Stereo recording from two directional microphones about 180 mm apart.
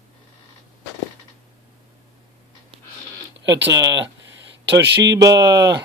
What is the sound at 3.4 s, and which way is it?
Speech, 80° right.